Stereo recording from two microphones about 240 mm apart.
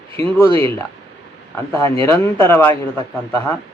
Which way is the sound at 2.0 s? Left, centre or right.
Centre.